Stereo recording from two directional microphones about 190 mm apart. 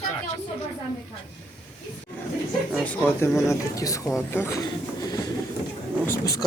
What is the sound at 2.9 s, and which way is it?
Speech, 10° left (ahead or behind).